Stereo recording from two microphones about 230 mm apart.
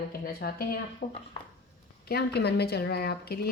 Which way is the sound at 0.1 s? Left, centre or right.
Left.